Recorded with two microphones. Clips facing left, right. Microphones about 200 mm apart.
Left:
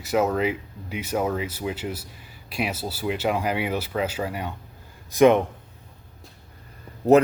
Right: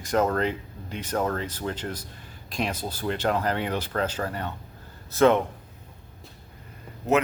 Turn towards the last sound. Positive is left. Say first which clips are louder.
# left 6 dB
turn(degrees=35)  # may be behind; listen again after turning